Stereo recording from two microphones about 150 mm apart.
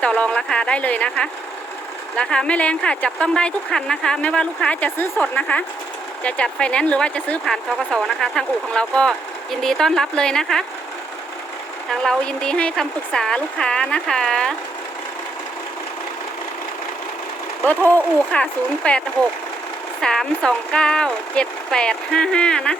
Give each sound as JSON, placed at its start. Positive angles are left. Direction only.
{"t": 0.0, "sound": "speech", "side_deg": 10}
{"t": 11.9, "sound": "speech", "side_deg": 5}
{"t": 17.7, "sound": "speech", "side_deg": 10}